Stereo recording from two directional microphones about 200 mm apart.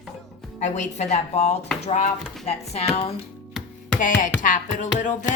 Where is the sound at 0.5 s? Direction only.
35° left (ahead or behind).